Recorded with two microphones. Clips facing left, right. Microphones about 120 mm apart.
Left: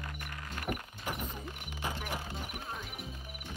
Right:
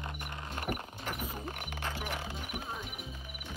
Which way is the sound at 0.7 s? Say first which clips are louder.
Even; 5° right (ahead or behind).